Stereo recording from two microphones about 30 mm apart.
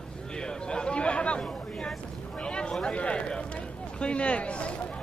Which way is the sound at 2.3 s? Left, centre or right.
Left.